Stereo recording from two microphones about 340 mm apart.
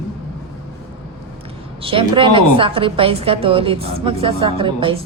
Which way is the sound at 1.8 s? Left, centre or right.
Centre.